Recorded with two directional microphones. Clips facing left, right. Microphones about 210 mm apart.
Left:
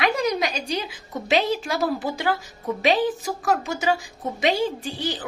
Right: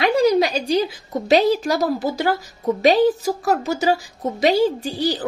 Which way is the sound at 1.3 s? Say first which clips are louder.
Right 6 dB; 40° right (ahead or behind).